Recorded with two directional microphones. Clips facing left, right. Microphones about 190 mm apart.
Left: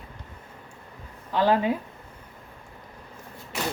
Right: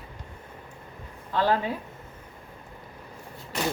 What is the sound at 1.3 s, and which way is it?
Speech, 15° left (ahead or behind).